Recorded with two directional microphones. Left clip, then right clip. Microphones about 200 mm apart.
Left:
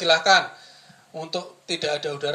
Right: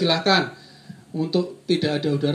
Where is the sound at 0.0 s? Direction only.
50° left (ahead or behind).